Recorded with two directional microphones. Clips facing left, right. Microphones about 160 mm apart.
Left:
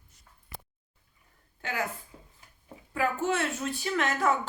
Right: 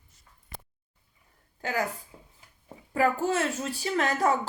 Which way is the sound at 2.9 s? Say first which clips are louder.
Right 3 dB; 40° right (ahead or behind).